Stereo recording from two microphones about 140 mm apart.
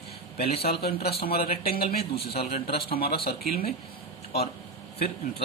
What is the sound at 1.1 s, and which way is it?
Speech, 90° left.